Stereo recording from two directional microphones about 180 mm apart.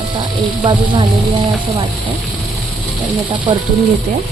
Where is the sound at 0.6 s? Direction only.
25° right (ahead or behind).